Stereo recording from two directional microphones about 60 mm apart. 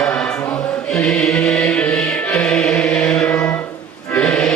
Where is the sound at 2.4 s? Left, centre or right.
Centre.